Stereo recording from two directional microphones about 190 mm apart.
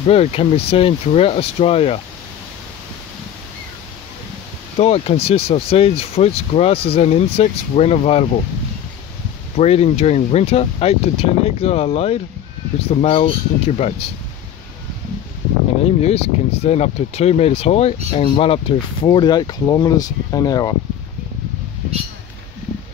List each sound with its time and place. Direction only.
0.0 s speech: 35° left (ahead or behind)
4.7 s speech: 35° left (ahead or behind)
9.6 s speech: 35° left (ahead or behind)
15.8 s speech: 35° left (ahead or behind)